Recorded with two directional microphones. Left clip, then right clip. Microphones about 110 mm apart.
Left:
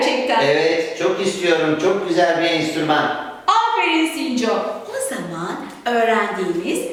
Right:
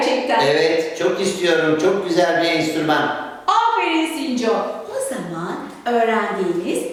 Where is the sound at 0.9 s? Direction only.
15° right (ahead or behind).